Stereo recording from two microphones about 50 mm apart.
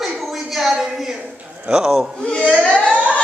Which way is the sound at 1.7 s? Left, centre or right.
Centre.